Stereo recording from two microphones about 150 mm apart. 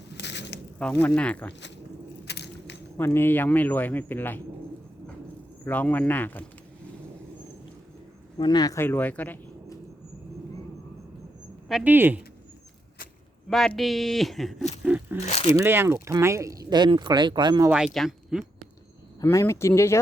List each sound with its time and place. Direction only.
0.8 s speech: 5° left (ahead or behind)
2.2 s a sound: 90° left
3.0 s speech: 15° left (ahead or behind)
5.6 s speech: 10° left (ahead or behind)
8.4 s speech: 30° left (ahead or behind); by 9.4 s 10° left (ahead or behind)
11.7 s speech: 10° right (ahead or behind)
13.5 s speech: centre (ahead or behind)
14.8 s a sound: 10° right (ahead or behind)
15.2 s speech: 45° left (ahead or behind)
15.5 s speech: 15° right (ahead or behind)
17.7 s speech: 5° right (ahead or behind)
19.2 s speech: 20° left (ahead or behind)